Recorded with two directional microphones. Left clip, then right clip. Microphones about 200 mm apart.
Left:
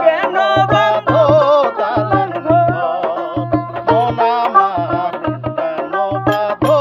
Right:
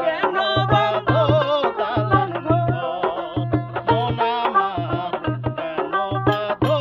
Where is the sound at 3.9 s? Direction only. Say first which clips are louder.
Left 7 dB; 25° left (ahead or behind).